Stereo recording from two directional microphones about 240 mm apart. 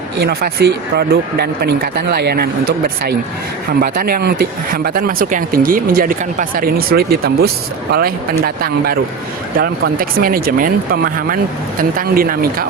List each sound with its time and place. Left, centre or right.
0.2 s speech: right